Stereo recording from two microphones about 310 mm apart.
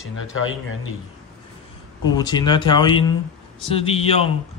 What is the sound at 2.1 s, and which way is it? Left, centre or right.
Speech, centre.